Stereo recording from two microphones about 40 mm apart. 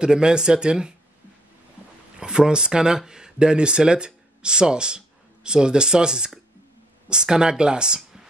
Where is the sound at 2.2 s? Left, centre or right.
Centre.